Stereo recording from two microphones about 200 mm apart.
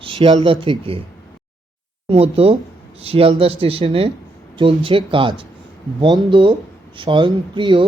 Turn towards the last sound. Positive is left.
turn(degrees=-25)  # may be behind; listen again after turning